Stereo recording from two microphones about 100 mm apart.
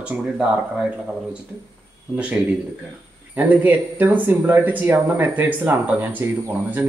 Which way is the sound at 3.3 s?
15° right (ahead or behind).